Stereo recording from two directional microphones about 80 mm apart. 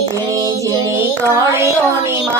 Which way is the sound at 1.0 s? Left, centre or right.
Right.